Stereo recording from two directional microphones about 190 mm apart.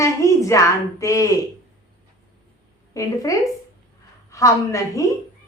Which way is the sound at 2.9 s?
15° left (ahead or behind).